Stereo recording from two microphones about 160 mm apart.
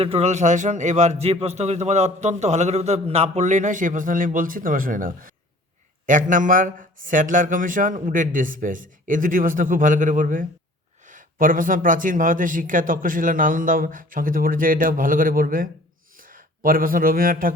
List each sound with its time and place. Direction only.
0.0 s a man's voice: 40° right (ahead or behind); by 17.5 s 60° right (ahead or behind)